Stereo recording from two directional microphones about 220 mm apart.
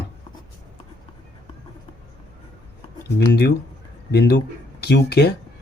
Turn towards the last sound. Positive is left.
turn(degrees=50)  # may be behind; listen again after turning